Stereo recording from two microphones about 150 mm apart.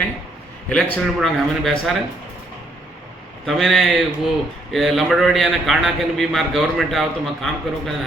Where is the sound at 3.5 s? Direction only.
Centre (ahead or behind).